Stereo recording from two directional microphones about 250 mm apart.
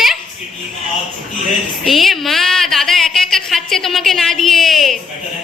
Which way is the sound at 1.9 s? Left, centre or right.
Centre.